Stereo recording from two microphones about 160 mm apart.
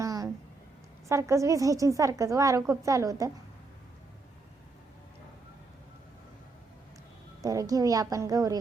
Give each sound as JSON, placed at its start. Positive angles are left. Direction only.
{"t": 0.0, "sound": "a sound", "side_deg": -20}
{"t": 1.0, "sound": "a woman's voice", "side_deg": -20}
{"t": 7.4, "sound": "a woman's voice", "side_deg": -20}